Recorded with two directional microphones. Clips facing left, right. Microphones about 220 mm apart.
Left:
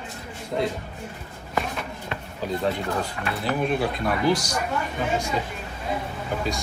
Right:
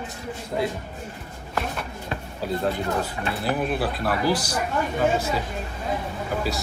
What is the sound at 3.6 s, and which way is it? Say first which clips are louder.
Speech: left 1 dB; 5° right (ahead or behind).